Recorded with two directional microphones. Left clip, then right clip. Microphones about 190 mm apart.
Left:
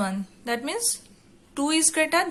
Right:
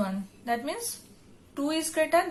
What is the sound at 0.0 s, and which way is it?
A woman's voice, 25° left (ahead or behind).